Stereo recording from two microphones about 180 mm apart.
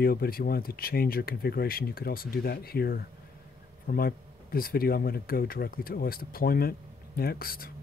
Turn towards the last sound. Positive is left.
turn(degrees=55)  # may be behind; listen again after turning